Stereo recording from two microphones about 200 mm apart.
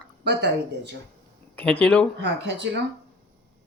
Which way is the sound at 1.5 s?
5° left (ahead or behind).